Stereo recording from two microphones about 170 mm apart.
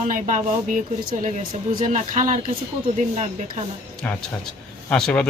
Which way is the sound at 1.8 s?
45° right (ahead or behind).